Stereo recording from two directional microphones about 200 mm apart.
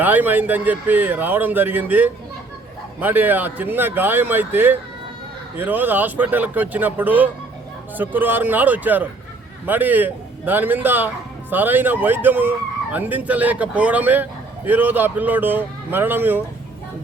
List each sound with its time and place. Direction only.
0.0 s speech: 10° right (ahead or behind)